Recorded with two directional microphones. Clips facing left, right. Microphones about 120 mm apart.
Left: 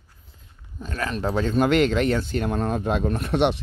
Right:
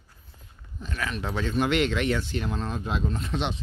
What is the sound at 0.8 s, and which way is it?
Speech, 40° left (ahead or behind).